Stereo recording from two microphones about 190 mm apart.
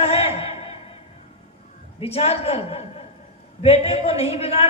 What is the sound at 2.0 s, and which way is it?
A man's voice, 30° left (ahead or behind).